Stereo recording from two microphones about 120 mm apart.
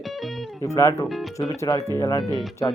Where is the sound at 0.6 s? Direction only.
25° left (ahead or behind).